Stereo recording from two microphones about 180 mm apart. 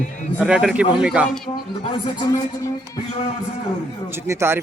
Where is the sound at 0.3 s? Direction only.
5° right (ahead or behind).